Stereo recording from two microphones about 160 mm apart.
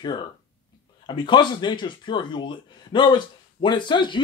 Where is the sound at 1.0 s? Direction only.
30° left (ahead or behind).